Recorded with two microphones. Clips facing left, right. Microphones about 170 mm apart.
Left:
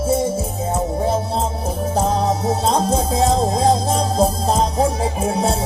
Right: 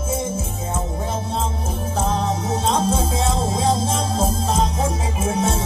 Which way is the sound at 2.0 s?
40° left (ahead or behind).